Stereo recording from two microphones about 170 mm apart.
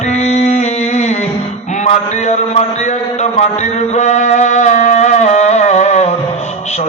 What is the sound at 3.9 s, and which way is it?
Music, 45° left (ahead or behind).